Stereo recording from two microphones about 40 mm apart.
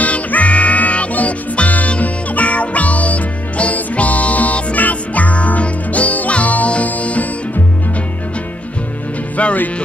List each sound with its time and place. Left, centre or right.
0.0 s music: left